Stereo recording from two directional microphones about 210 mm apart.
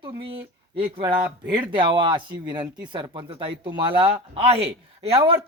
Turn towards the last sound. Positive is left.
turn(degrees=-25)  # may be behind; listen again after turning